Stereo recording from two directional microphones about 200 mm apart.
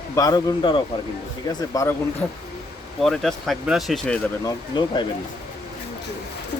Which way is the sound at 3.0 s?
Centre (ahead or behind).